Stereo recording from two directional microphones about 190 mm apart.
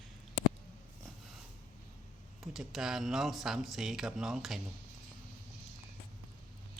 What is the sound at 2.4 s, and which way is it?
Speech, centre (ahead or behind).